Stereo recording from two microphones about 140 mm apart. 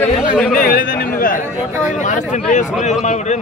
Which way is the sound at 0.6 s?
90° left.